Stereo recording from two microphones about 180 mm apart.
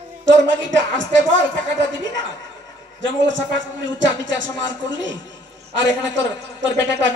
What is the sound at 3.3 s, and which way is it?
Speech, 90° right.